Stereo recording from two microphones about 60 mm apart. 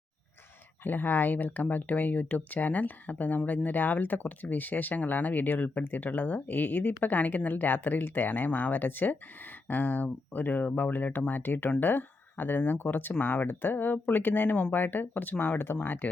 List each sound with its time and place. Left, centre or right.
0.9 s speech: left